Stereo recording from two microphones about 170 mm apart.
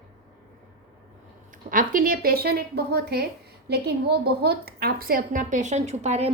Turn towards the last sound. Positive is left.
turn(degrees=-40)  # may be behind; listen again after turning